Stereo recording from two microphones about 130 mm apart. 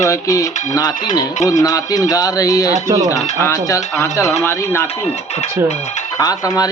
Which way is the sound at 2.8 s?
25° right (ahead or behind).